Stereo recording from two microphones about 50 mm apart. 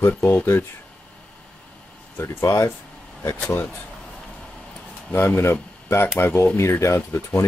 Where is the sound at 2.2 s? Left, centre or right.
Left.